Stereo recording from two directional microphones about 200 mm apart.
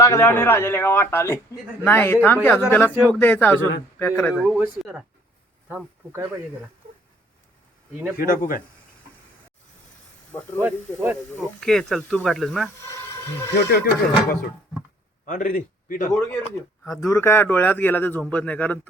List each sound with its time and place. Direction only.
0.0 s a man's voice: 10° left (ahead or behind)
2.8 s speech: 10° right (ahead or behind)
3.1 s a man's voice: 10° left (ahead or behind); by 6.2 s 10° right (ahead or behind)
8.2 s speech: 45° left (ahead or behind)
10.6 s speech: 10° right (ahead or behind)
11.3 s speech: 5° left (ahead or behind)
13.6 s speech: 55° left (ahead or behind)
15.3 s a man's voice: 40° left (ahead or behind)
17.0 s a man's voice: 15° left (ahead or behind)